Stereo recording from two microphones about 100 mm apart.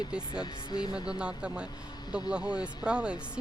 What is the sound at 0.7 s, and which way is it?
Speech, 40° left (ahead or behind).